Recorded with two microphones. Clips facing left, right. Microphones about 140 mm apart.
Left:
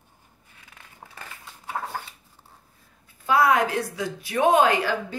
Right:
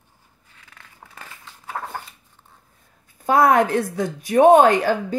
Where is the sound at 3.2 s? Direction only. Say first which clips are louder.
Right 4 dB; 50° right (ahead or behind).